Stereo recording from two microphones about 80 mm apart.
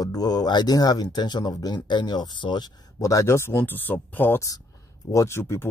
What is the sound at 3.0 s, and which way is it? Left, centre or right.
Speech, left.